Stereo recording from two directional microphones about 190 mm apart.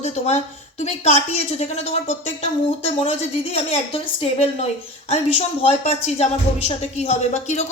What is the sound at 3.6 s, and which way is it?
Speech, 30° left (ahead or behind).